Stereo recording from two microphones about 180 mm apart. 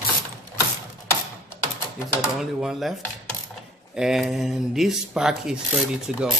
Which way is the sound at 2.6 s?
Centre (ahead or behind).